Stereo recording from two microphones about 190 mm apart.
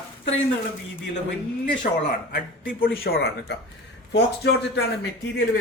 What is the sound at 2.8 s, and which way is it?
Speech, 50° left (ahead or behind).